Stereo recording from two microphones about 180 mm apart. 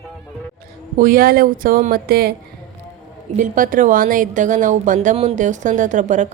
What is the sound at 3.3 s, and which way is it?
A woman's voice, 50° right (ahead or behind).